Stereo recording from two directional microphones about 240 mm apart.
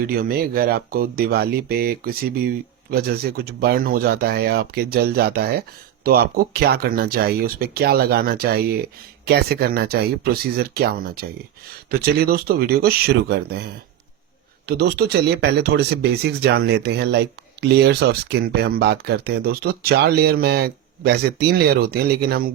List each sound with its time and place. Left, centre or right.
0.1 s speech: right
14.7 s speech: right